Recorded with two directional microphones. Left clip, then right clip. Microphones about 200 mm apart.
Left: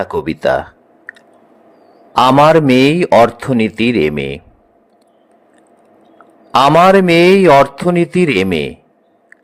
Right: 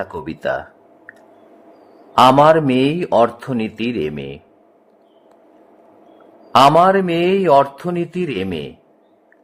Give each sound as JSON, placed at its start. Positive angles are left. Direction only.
{"t": 0.0, "sound": "a man's voice", "side_deg": 20}
{"t": 2.1, "sound": "a man's voice", "side_deg": 20}
{"t": 6.5, "sound": "a man's voice", "side_deg": 25}